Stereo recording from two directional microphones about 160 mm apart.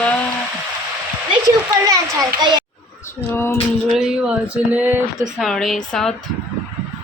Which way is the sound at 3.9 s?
5° right (ahead or behind).